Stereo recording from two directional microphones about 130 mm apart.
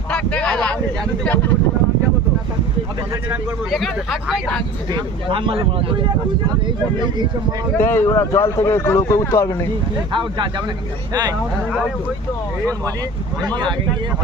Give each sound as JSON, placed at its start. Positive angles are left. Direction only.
{"t": 0.1, "sound": "a sound", "side_deg": 10}
{"t": 3.7, "sound": "speech", "side_deg": 0}
{"t": 4.9, "sound": "speech", "side_deg": -40}
{"t": 7.8, "sound": "speech", "side_deg": 15}
{"t": 10.1, "sound": "speech", "side_deg": -40}
{"t": 13.4, "sound": "speech", "side_deg": -35}